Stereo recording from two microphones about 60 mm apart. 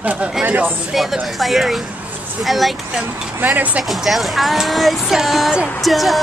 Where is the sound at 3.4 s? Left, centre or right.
Right.